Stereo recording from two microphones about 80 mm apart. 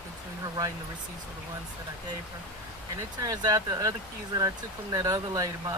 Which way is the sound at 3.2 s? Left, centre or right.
Right.